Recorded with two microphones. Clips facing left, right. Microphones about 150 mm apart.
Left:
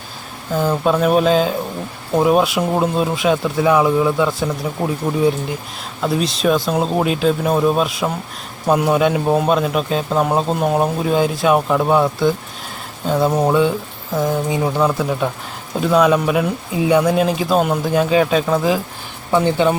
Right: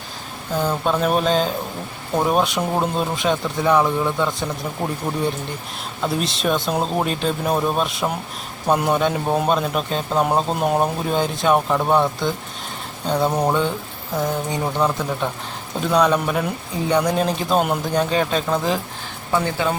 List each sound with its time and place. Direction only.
0.5 s a man's voice: 5° left (ahead or behind)
6.0 s a man's voice: centre (ahead or behind)
19.3 s speech: 20° left (ahead or behind)